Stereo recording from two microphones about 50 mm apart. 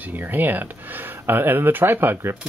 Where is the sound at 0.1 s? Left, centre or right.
Right.